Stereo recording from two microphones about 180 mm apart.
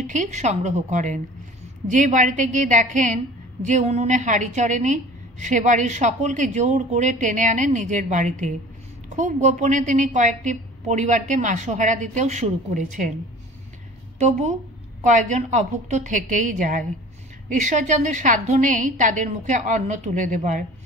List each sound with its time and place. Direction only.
0.0 s a woman's voice: 45° right (ahead or behind)
15.0 s a woman's voice: 45° right (ahead or behind)